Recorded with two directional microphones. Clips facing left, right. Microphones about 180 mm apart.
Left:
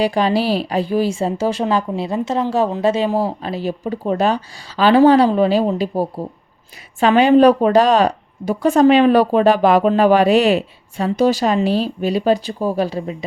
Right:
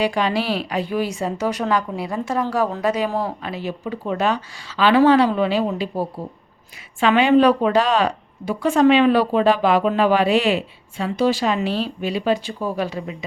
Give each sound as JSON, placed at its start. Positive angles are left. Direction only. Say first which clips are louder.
{"t": 0.0, "sound": "a woman's voice", "louder": "left 4 dB", "side_deg": 35}